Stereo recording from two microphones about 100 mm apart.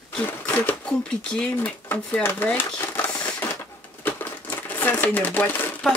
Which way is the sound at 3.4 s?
20° left (ahead or behind).